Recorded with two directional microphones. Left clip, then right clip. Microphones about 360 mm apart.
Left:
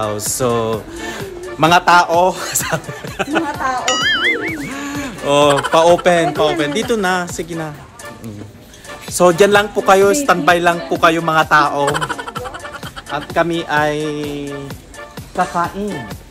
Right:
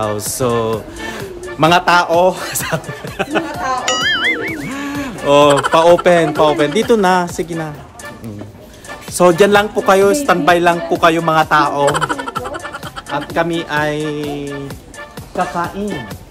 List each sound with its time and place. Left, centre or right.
0.0 s speech: centre
3.5 s speech: centre
9.2 s speech: centre